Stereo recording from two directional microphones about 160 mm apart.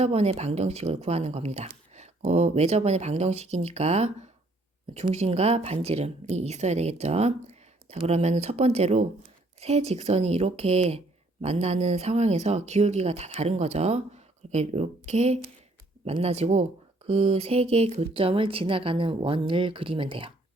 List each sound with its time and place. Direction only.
0.0 s speech: 40° right (ahead or behind)